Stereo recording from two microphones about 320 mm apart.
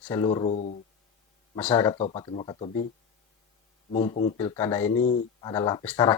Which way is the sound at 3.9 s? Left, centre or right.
Centre.